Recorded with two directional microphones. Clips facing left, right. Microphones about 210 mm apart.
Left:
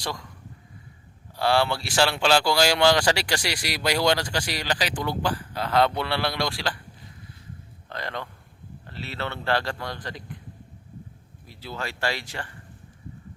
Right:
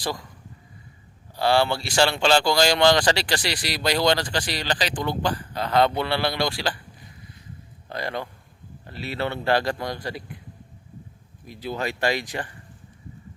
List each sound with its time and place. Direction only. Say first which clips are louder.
0.0 s speech: right 3 dB; 5° right (ahead or behind)
1.4 s speech: right 2 dB; centre (ahead or behind)
7.9 s speech: right 4 dB; 10° right (ahead or behind)
11.4 s speech: right 6 dB; 15° right (ahead or behind)